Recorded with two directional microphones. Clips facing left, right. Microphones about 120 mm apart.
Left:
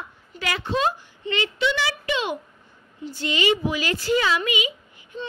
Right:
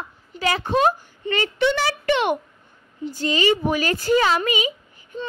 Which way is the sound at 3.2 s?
40° right (ahead or behind).